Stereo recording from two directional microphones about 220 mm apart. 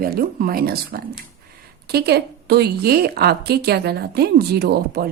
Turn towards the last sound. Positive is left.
turn(degrees=-45)  # may be behind; listen again after turning